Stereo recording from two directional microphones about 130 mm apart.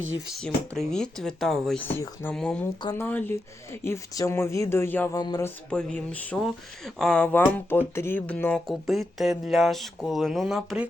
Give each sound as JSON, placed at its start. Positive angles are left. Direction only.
{"t": 0.3, "sound": "speech", "side_deg": 5}
{"t": 1.8, "sound": "speech", "side_deg": 15}
{"t": 2.3, "sound": "speech", "side_deg": 5}
{"t": 2.9, "sound": "speech", "side_deg": 15}
{"t": 5.1, "sound": "speech", "side_deg": 35}
{"t": 5.7, "sound": "speech", "side_deg": 10}
{"t": 8.6, "sound": "speech", "side_deg": 0}